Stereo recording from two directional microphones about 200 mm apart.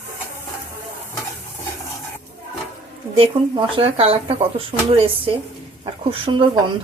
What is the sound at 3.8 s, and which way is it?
Speech, 25° right (ahead or behind).